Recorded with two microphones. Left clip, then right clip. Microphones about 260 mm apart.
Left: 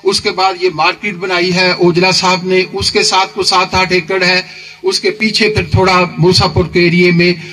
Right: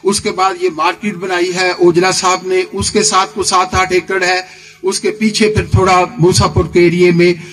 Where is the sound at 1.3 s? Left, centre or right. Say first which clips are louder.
Left 2 dB; right.